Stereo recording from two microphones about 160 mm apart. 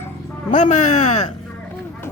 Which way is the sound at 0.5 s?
50° left (ahead or behind).